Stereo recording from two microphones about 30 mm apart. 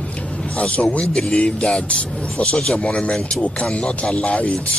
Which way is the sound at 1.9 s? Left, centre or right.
Left.